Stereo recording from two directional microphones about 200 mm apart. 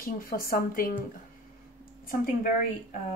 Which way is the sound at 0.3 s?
45° left (ahead or behind).